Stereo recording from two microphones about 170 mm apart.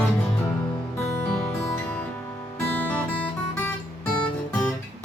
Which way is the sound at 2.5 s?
10° left (ahead or behind).